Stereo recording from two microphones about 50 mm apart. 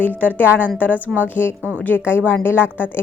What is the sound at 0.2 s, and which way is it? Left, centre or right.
Speech, left.